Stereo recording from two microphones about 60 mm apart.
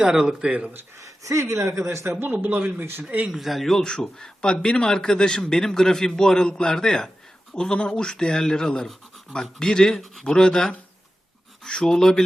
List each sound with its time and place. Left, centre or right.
0.0 s speech: centre
0.9 s speech: right
2.2 s speech: right
3.2 s a man's voice: centre